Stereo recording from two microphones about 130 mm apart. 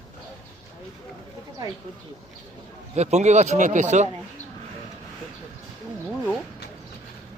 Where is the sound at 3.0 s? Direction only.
60° right (ahead or behind).